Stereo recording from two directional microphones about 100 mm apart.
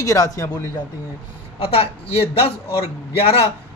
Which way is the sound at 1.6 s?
70° left (ahead or behind).